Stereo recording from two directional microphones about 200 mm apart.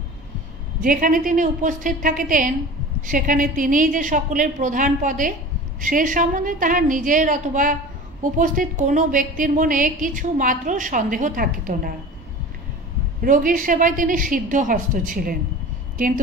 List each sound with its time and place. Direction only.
0.8 s a woman's voice: 45° right (ahead or behind)
13.2 s a woman's voice: 45° right (ahead or behind)